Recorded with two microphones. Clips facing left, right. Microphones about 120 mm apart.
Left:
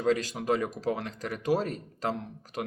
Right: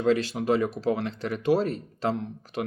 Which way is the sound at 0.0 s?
40° left (ahead or behind).